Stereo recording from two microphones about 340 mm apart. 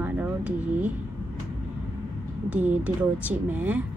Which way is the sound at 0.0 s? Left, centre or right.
Centre.